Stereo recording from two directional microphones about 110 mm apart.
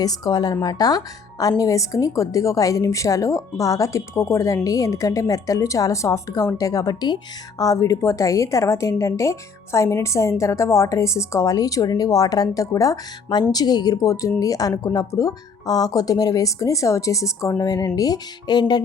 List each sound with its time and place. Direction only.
0.0 s a woman's voice: 35° left (ahead or behind)